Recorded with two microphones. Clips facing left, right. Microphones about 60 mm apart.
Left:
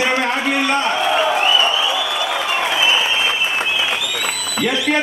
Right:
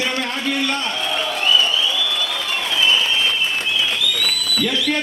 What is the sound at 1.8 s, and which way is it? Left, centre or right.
Applause, centre.